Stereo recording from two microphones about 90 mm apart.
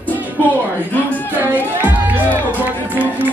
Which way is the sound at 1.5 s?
20° right (ahead or behind).